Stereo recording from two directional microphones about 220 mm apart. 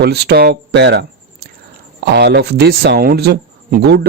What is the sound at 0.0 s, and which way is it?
Speech, 45° right (ahead or behind).